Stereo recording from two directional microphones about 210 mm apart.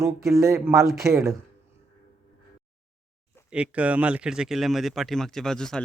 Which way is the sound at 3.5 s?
5° right (ahead or behind).